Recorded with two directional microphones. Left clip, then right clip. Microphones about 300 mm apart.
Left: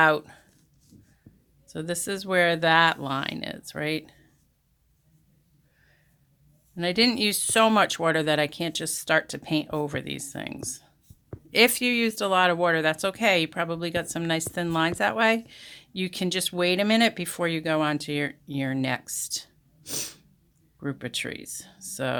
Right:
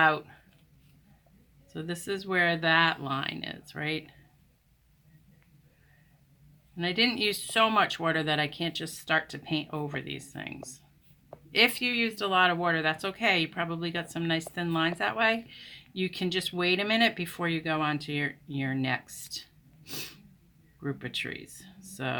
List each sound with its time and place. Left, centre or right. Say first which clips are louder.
0.0 s speech: left 4 dB; left
1.6 s speech: left 5 dB; left
6.7 s speech: left 4 dB; left